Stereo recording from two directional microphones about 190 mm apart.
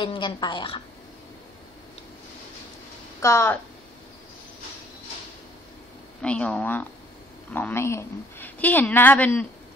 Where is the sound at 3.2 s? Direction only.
15° left (ahead or behind).